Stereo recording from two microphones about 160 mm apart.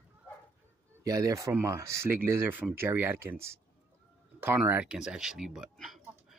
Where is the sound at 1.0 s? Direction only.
20° right (ahead or behind).